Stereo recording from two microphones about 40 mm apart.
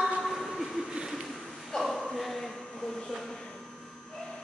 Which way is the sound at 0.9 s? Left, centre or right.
Centre.